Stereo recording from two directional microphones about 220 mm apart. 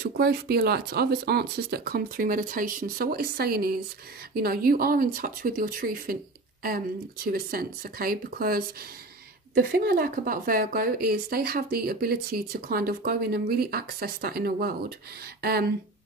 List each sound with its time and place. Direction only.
0.0 s a woman's voice: 45° right (ahead or behind)
7.2 s a woman's voice: 40° right (ahead or behind)